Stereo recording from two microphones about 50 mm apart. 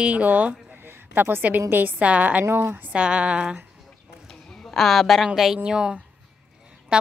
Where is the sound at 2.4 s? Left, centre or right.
Right.